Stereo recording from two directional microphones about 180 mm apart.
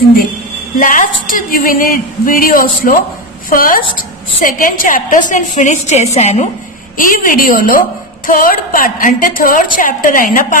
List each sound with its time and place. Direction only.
0.7 s a woman's voice: 50° left (ahead or behind)
7.0 s a woman's voice: 50° left (ahead or behind)